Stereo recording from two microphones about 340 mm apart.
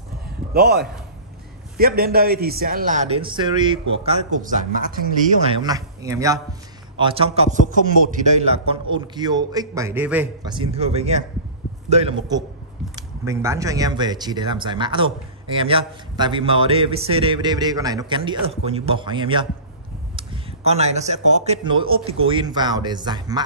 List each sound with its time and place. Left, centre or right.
0.5 s a man's voice: right
5.5 s speech: centre